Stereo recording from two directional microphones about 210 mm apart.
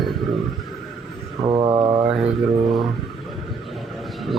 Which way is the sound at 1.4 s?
15° right (ahead or behind).